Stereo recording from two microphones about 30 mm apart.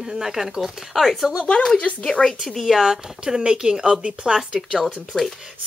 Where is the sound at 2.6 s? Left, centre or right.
Centre.